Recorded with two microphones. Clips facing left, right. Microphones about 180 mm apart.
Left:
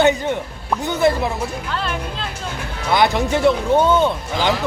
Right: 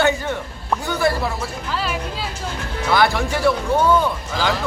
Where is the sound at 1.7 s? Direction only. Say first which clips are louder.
Right 3 dB; 5° right (ahead or behind).